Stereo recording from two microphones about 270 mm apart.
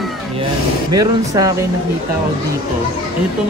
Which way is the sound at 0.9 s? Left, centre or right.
Centre.